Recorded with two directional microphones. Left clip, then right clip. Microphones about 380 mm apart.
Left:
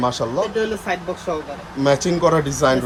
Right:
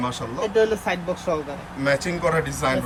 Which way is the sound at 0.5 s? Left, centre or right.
Centre.